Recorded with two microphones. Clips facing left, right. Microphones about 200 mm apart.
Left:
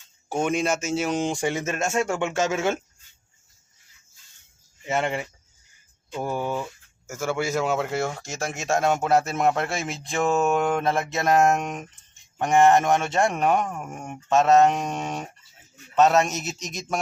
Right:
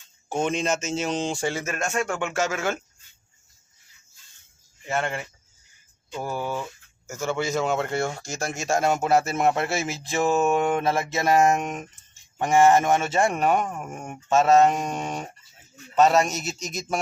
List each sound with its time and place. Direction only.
0.3 s speech: 10° left (ahead or behind)
4.9 s speech: 20° left (ahead or behind); by 17.0 s centre (ahead or behind)